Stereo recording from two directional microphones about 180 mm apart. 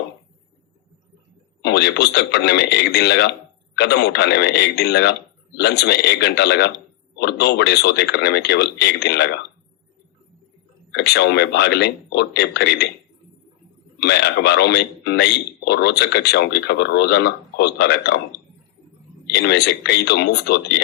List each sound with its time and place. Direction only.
1.6 s a man's voice: 65° left (ahead or behind)
10.9 s a man's voice: 65° left (ahead or behind)
14.0 s a man's voice: 65° left (ahead or behind)